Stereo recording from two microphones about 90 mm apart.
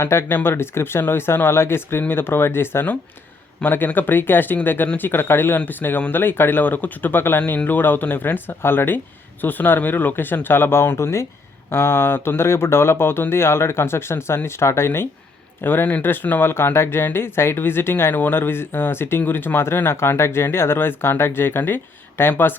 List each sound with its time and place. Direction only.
0.0 s speech: 25° left (ahead or behind)